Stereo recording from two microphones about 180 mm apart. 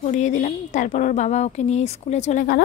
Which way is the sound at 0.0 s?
40° left (ahead or behind).